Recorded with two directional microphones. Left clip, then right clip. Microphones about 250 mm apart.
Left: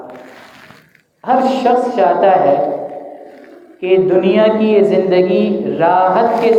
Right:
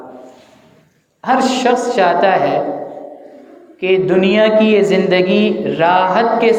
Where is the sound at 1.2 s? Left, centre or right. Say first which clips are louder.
Left 1 dB; right.